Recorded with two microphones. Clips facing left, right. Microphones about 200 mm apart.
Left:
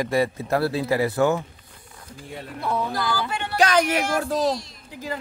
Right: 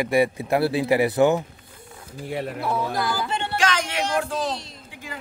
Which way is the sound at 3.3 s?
25° right (ahead or behind).